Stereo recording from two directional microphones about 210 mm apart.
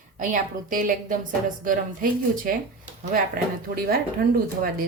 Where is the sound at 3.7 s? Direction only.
45° right (ahead or behind).